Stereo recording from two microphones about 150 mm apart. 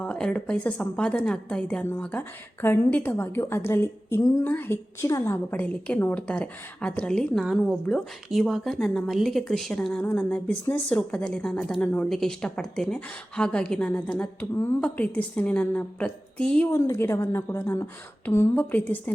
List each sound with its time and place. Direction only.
0.0 s a woman's voice: 5° left (ahead or behind)
16.7 s a woman's voice: 20° left (ahead or behind)